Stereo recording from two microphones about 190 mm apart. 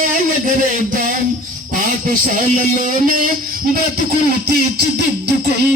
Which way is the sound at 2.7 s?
45° right (ahead or behind).